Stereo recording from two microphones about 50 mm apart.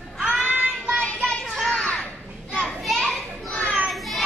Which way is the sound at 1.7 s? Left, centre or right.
Left.